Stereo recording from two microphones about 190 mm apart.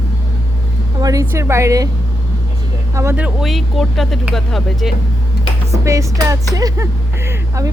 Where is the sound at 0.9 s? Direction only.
20° right (ahead or behind).